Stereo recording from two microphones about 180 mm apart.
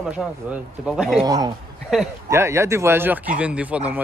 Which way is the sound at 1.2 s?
20° right (ahead or behind).